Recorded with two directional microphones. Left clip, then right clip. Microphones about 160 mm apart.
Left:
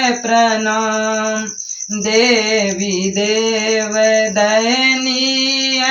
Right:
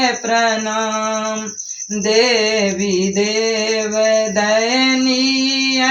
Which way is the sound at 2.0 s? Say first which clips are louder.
Left 1 dB; 20° right (ahead or behind).